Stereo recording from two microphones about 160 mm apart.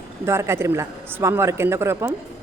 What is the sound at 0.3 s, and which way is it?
A woman's voice, 15° right (ahead or behind).